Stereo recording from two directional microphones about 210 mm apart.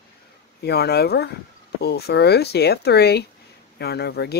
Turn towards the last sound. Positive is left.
turn(degrees=50)  # may be behind; listen again after turning